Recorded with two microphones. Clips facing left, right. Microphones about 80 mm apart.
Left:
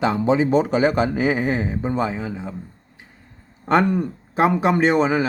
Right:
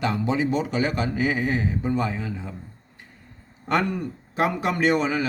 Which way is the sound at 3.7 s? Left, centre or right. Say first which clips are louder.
Left 6 dB; left.